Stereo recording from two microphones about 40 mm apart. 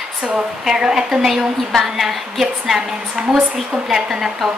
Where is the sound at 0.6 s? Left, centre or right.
Centre.